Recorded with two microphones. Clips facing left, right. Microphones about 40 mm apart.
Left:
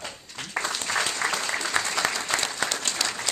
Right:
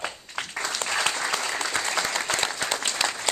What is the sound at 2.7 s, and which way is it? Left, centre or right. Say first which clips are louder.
Applause: right 2 dB; centre.